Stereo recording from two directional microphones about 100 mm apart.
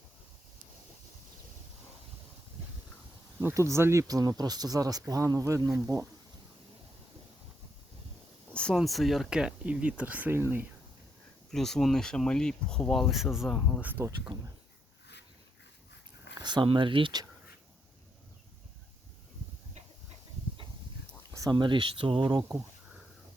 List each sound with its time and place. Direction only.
3.4 s speech: 30° right (ahead or behind)
4.0 s speech: 40° right (ahead or behind)
8.5 s a sound: 10° left (ahead or behind)
8.8 s speech: centre (ahead or behind); by 10.7 s 20° right (ahead or behind)
11.5 s speech: 5° left (ahead or behind)
13.8 s speech: 20° right (ahead or behind)
14.3 s speech: 55° right (ahead or behind)
16.4 s a sound: 50° right (ahead or behind)
16.6 s speech: 55° right (ahead or behind)
21.5 s speech: 55° right (ahead or behind)